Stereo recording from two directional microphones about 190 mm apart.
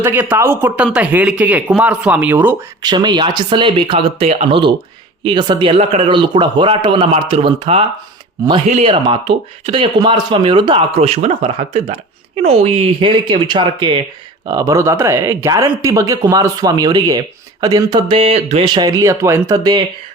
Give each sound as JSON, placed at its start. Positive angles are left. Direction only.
{"t": 0.0, "sound": "speech", "side_deg": -10}
{"t": 2.8, "sound": "speech", "side_deg": -25}